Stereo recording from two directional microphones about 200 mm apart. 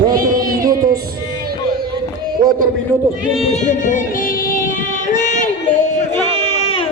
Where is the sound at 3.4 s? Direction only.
35° left (ahead or behind).